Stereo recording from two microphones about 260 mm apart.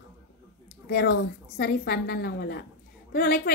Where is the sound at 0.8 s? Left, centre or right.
Left.